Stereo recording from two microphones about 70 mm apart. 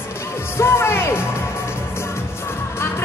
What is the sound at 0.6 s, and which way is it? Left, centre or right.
Speech, left.